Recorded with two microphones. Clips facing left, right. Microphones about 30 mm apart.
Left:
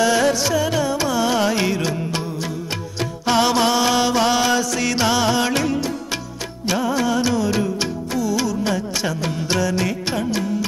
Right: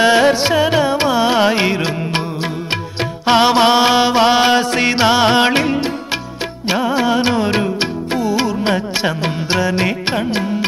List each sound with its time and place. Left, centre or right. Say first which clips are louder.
0.0 s music: right 5 dB; right
3.3 s mantra: right 6 dB; right
6.7 s music: right 4 dB; right